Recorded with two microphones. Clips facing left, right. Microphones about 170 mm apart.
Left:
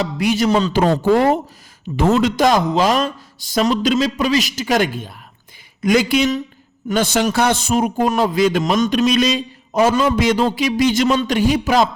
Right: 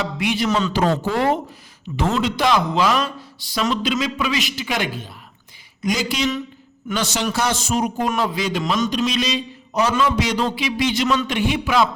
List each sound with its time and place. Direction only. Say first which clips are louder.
0.0 s a man's voice: left 4 dB; 40° left (ahead or behind)
2.0 s a man's voice: left 6 dB; 45° left (ahead or behind)
8.0 s a man's voice: left 6 dB; 40° left (ahead or behind)